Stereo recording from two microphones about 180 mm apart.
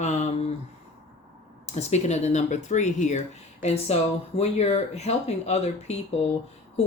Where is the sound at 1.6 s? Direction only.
40° left (ahead or behind).